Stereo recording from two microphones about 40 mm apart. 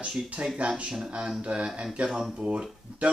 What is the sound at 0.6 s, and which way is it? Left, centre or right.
Speech, right.